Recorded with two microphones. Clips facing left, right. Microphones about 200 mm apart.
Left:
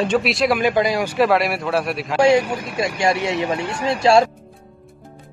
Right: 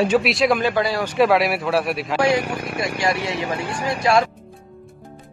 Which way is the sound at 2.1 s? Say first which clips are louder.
Left 5 dB; 25° left (ahead or behind).